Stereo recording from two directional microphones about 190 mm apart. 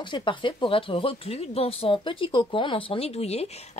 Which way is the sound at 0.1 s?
25° left (ahead or behind).